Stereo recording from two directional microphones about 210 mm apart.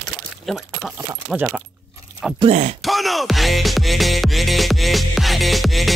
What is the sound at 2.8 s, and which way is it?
Music, centre (ahead or behind).